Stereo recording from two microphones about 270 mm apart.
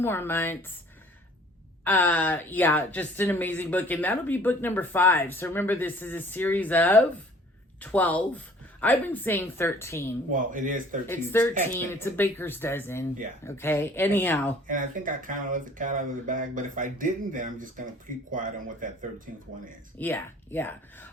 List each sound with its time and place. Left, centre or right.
0.0 s speech: centre
1.8 s speech: centre
10.3 s speech: right
11.0 s speech: centre
14.7 s speech: right
20.0 s speech: centre